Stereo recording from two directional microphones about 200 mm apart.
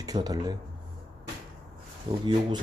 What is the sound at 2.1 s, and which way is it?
Speech, 25° right (ahead or behind).